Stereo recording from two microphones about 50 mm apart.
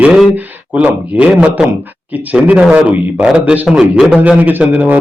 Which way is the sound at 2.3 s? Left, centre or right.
Right.